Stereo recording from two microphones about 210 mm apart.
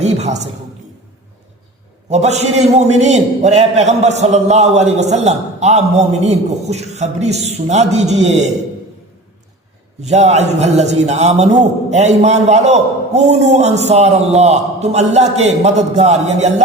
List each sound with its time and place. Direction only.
0.0 s a man's voice: 30° right (ahead or behind)
2.0 s a man's voice: 30° right (ahead or behind)
10.0 s a man's voice: 30° right (ahead or behind)